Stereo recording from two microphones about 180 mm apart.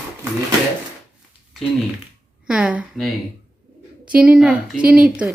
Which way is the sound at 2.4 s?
5° right (ahead or behind).